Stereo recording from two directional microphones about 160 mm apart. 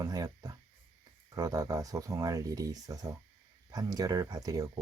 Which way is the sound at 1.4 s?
20° right (ahead or behind).